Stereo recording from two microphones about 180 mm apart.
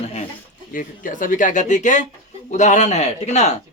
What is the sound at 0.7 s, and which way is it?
A man's voice, 45° left (ahead or behind).